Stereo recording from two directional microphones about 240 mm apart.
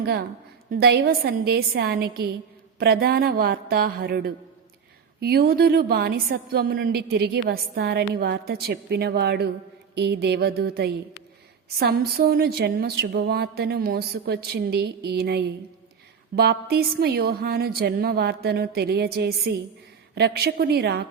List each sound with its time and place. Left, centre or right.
0.0 s a woman's voice: right
9.9 s a sound: right
11.8 s a woman's voice: right